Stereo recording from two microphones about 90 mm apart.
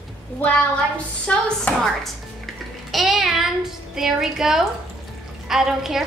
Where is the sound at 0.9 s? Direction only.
15° left (ahead or behind).